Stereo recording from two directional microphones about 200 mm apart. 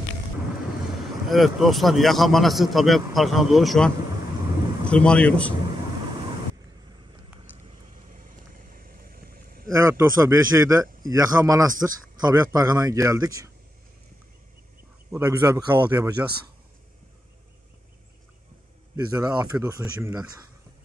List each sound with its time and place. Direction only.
1.3 s a man's voice: centre (ahead or behind)
7.6 s vehicle: 40° right (ahead or behind)
9.7 s speech: 15° right (ahead or behind)
15.0 s speech: 10° right (ahead or behind)
18.9 s speech: 10° right (ahead or behind)